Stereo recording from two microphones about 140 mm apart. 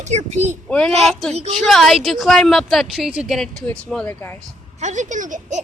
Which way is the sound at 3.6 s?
10° left (ahead or behind).